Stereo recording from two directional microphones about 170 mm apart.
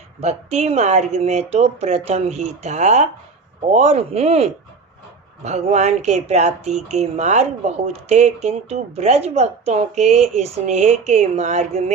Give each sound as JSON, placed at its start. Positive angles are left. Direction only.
{"t": 0.2, "sound": "speech", "side_deg": -40}